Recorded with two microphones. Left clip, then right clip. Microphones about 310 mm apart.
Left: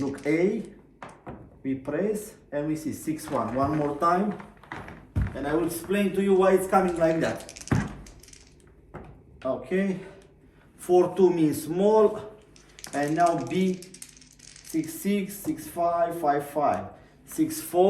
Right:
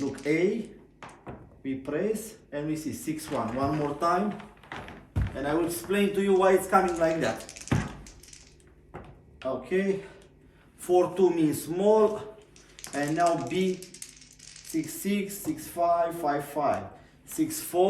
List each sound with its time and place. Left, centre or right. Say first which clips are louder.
0.0 s speech: left 1 dB; centre
0.9 s door: left 3 dB; centre
2.5 s speech: left 3 dB; centre
9.4 s speech: left 1 dB; centre